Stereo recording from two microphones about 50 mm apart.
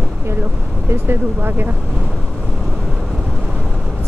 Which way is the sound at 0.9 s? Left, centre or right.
Right.